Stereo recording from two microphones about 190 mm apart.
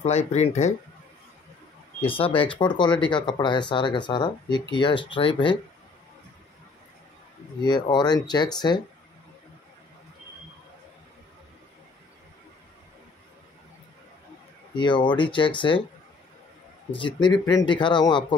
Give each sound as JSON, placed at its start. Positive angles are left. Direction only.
{"t": 0.3, "sound": "speech", "side_deg": 35}
{"t": 2.0, "sound": "speech", "side_deg": 30}
{"t": 7.6, "sound": "speech", "side_deg": 25}
{"t": 14.8, "sound": "speech", "side_deg": 25}
{"t": 16.9, "sound": "speech", "side_deg": 25}